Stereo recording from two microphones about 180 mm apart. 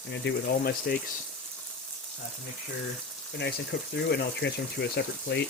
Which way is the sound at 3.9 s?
70° left (ahead or behind).